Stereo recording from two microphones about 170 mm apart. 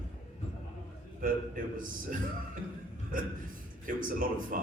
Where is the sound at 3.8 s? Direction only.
55° right (ahead or behind).